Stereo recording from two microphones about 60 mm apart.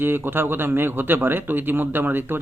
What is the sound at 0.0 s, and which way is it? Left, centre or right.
A man's voice, right.